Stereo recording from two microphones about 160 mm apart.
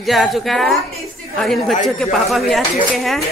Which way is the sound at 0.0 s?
Centre (ahead or behind).